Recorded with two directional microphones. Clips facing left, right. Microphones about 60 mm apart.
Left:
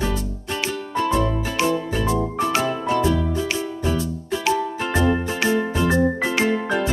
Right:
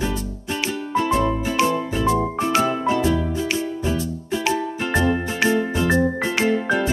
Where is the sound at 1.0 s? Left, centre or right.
Centre.